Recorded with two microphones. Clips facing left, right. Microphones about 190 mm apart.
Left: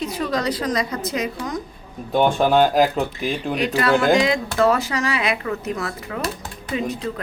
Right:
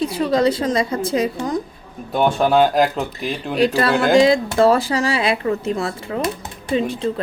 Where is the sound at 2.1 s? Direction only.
5° right (ahead or behind).